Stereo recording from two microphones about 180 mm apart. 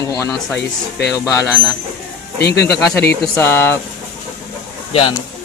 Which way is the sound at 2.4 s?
65° left (ahead or behind).